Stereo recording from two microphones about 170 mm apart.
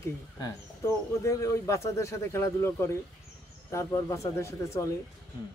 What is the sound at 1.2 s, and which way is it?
A man's voice, 20° left (ahead or behind).